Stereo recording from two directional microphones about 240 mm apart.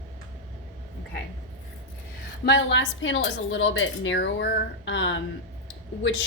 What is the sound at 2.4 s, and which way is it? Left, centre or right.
A woman's voice, left.